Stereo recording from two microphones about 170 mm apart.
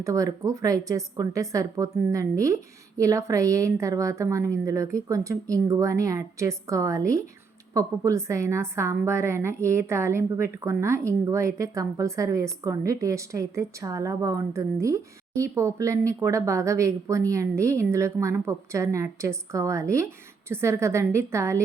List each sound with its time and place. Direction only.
0.0 s a woman's voice: 20° right (ahead or behind)